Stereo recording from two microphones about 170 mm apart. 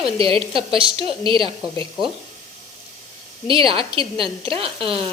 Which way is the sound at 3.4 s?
30° right (ahead or behind).